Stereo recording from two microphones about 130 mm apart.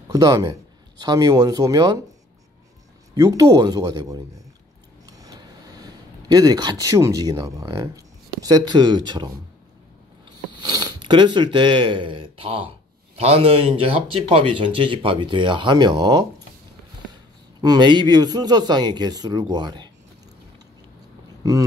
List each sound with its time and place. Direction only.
0.1 s speech: 25° right (ahead or behind)
3.2 s speech: 30° right (ahead or behind)
5.0 s vehicle: 25° right (ahead or behind)
5.8 s speech: 30° right (ahead or behind)
10.5 s a man's voice: 35° right (ahead or behind)
21.4 s speech: 25° right (ahead or behind)